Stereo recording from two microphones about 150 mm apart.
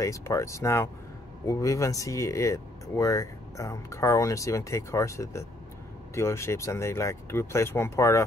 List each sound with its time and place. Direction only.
0.0 s speech: 20° left (ahead or behind)